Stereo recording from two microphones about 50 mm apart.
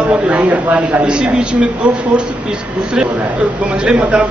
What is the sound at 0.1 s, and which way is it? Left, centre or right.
Speech, right.